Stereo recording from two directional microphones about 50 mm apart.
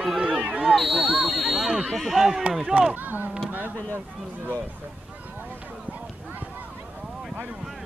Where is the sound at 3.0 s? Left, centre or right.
Right.